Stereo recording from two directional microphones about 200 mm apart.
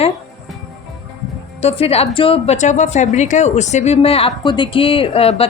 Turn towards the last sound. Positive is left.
turn(degrees=30)  # may be behind; listen again after turning